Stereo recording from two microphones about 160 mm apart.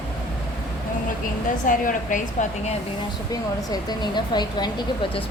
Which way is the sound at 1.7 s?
55° left (ahead or behind).